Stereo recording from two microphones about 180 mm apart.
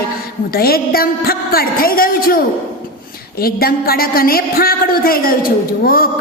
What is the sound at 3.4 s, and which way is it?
A woman's voice, 55° left (ahead or behind).